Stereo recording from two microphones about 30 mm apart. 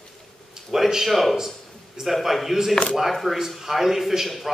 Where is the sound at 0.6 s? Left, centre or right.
Centre.